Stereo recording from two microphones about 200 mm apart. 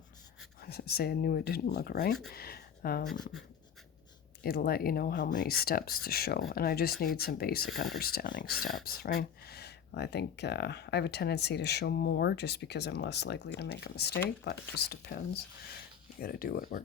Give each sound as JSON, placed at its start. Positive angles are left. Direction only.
{"t": 0.6, "sound": "speech", "side_deg": 50}
{"t": 4.4, "sound": "speech", "side_deg": 50}